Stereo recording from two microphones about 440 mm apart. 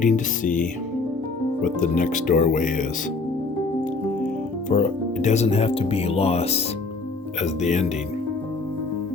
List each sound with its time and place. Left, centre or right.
0.0 s speech: centre
1.6 s speech: centre
4.7 s speech: centre